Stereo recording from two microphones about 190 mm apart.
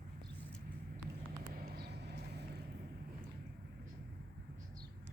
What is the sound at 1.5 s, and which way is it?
Vehicle, 55° right (ahead or behind).